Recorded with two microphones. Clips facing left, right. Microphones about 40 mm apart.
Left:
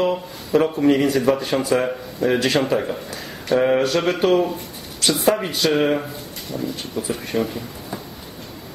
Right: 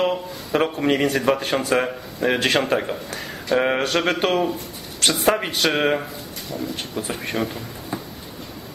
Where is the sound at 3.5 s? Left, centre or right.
Right.